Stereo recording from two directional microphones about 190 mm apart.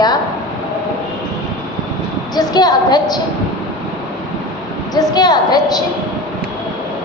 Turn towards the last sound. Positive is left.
turn(degrees=20)  # may be behind; listen again after turning